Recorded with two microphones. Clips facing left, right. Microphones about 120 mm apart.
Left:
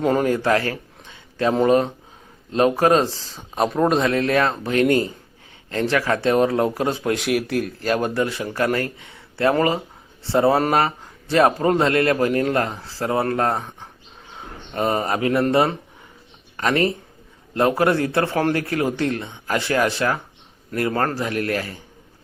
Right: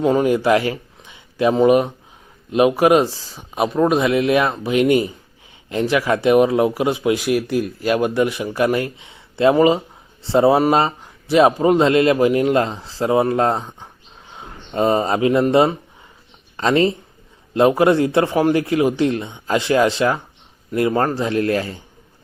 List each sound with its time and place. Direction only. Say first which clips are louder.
0.0 s speech: right 3 dB; centre (ahead or behind)
0.3 s a sound: right 4 dB; 15° right (ahead or behind)
1.6 s a man's voice: right 3 dB; 15° right (ahead or behind)